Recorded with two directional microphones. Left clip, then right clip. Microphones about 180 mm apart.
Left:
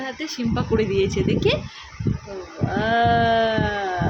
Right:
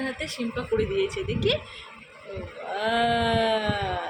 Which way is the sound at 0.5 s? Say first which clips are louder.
Left 4 dB; 40° left (ahead or behind).